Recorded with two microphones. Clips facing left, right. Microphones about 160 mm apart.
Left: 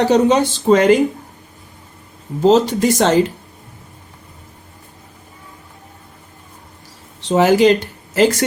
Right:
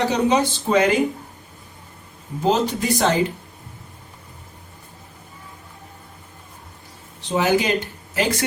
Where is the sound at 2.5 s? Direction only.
90° left.